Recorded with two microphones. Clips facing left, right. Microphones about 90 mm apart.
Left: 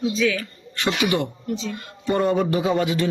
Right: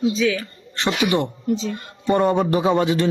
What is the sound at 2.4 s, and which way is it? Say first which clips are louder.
Speech: right 3 dB; 40° right (ahead or behind).